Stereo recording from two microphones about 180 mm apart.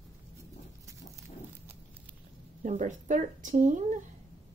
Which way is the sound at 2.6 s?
40° right (ahead or behind).